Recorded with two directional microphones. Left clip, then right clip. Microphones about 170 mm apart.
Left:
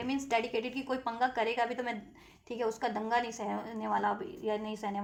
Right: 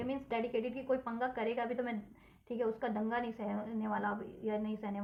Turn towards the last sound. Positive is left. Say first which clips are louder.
# left 4 dB
turn(degrees=35)  # may be behind; listen again after turning